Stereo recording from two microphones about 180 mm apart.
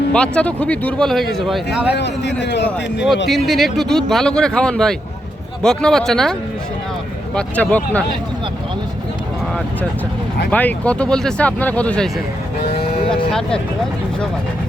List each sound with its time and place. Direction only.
0.1 s speech: 5° left (ahead or behind)
2.0 s a man's voice: 75° left (ahead or behind)
3.2 s speech: centre (ahead or behind)
7.3 s speech: 10° left (ahead or behind)
10.5 s speech: 10° left (ahead or behind)
12.5 s cattle: 60° left (ahead or behind)
13.1 s music: 5° left (ahead or behind)